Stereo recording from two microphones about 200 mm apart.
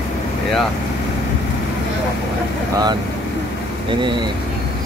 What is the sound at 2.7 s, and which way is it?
Speech, 20° right (ahead or behind).